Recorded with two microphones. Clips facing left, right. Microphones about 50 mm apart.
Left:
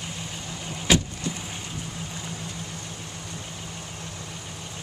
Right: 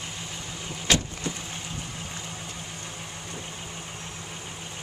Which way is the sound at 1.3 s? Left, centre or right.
Centre.